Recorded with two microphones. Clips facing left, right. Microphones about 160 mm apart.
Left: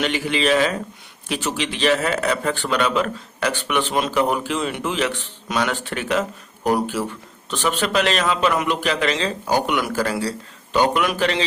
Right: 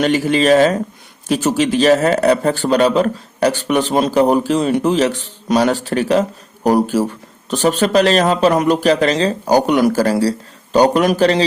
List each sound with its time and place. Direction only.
0.0 s a man's voice: 40° right (ahead or behind)